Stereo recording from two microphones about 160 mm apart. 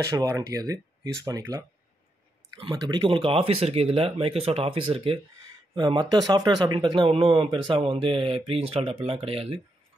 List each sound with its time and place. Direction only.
0.1 s speech: 20° right (ahead or behind)
2.7 s speech: 25° right (ahead or behind)